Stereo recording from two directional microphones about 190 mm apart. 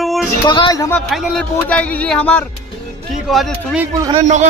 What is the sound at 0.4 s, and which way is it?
Speech, 20° left (ahead or behind).